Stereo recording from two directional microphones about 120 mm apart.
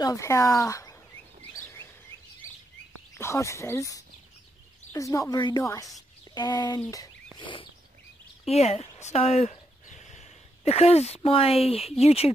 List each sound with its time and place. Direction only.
0.0 s speech: 25° left (ahead or behind)
1.5 s chirp: 20° left (ahead or behind)
3.2 s speech: 25° left (ahead or behind)
6.3 s speech: 40° left (ahead or behind)
7.3 s bird: 45° left (ahead or behind)
8.5 s speech: 60° left (ahead or behind)